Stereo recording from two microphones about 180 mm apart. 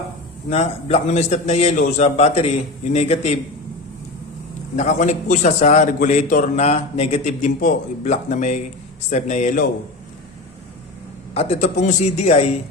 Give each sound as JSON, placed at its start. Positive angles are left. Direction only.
{"t": 0.5, "sound": "a man's voice", "side_deg": 35}
{"t": 4.8, "sound": "a man's voice", "side_deg": 40}
{"t": 11.3, "sound": "a man's voice", "side_deg": 35}